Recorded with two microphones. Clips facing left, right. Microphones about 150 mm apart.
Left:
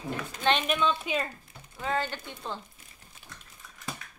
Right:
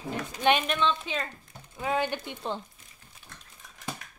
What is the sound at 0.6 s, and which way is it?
Speech, 10° left (ahead or behind).